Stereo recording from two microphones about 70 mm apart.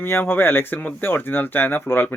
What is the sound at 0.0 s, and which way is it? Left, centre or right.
Speech, left.